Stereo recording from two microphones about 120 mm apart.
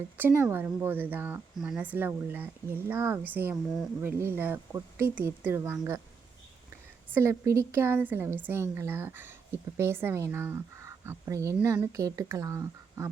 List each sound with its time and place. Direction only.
0.2 s a woman's voice: 20° right (ahead or behind)
7.1 s a woman's voice: 20° right (ahead or behind)